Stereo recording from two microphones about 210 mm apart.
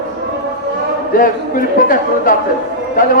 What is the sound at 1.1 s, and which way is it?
A man's voice, 40° left (ahead or behind).